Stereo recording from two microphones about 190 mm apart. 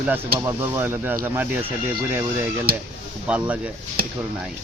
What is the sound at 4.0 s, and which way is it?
Speech, 50° right (ahead or behind).